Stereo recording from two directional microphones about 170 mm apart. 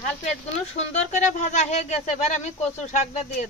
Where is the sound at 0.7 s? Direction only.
40° left (ahead or behind).